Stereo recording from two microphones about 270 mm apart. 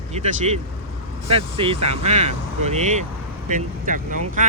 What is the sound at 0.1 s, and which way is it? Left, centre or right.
Speech, right.